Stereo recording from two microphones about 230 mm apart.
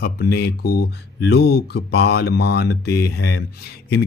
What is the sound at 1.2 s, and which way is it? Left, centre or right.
Speech, left.